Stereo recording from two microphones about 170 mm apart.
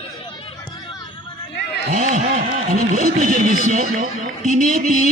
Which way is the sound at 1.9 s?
45° right (ahead or behind).